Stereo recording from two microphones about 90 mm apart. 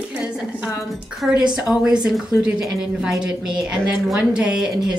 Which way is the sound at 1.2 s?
10° right (ahead or behind).